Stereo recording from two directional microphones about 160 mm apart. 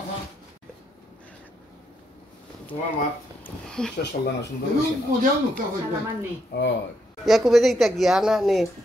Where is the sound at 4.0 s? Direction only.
90° left.